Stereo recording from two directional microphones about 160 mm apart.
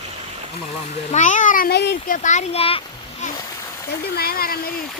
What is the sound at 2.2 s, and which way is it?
Speech, 50° left (ahead or behind).